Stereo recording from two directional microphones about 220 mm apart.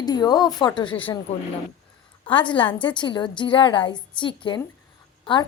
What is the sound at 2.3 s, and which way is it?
A woman's voice, 20° left (ahead or behind).